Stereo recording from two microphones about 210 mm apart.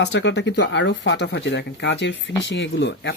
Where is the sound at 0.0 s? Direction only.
55° left (ahead or behind).